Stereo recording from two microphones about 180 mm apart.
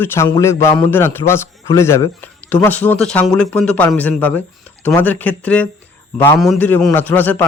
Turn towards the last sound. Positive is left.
turn(degrees=10)  # may be behind; listen again after turning